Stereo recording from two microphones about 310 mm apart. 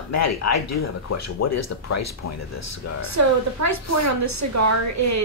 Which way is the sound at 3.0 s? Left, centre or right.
Right.